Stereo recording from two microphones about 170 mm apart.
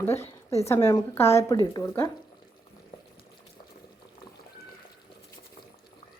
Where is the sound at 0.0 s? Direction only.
15° left (ahead or behind).